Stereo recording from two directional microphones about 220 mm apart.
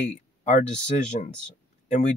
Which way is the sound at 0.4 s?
35° left (ahead or behind).